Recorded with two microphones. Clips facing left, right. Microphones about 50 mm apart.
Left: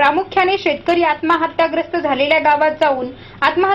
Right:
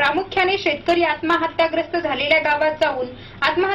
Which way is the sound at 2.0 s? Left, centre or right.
Centre.